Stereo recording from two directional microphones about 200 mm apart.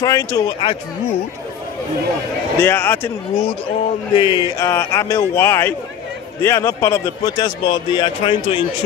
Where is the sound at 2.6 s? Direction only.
10° left (ahead or behind).